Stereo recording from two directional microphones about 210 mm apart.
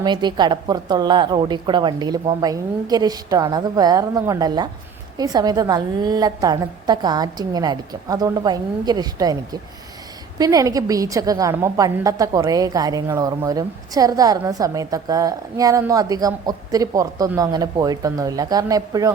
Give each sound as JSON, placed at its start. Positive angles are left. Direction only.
{"t": 0.0, "sound": "a woman's voice", "side_deg": -20}